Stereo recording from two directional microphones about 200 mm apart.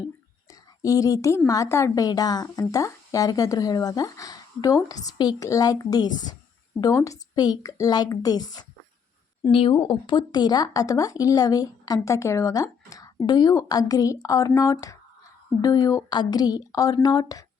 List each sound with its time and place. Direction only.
0.8 s a woman's voice: 15° left (ahead or behind)